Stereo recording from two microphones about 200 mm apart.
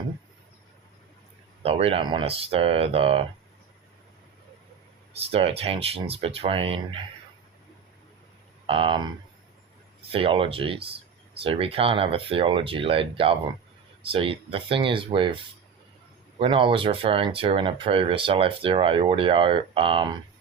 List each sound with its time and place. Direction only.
1.6 s speech: 30° right (ahead or behind)
5.1 s speech: 30° right (ahead or behind)
8.6 s speech: 25° right (ahead or behind)
10.1 s speech: 25° right (ahead or behind)
16.4 s speech: 25° right (ahead or behind)